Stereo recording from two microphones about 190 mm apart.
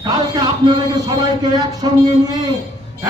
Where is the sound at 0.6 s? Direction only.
25° right (ahead or behind).